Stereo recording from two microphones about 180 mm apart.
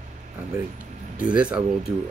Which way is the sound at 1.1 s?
5° right (ahead or behind).